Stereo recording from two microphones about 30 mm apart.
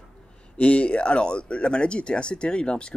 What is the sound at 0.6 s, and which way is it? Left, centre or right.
Speech, left.